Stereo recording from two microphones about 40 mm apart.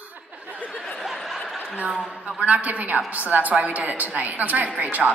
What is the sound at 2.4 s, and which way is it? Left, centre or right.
A woman's voice, right.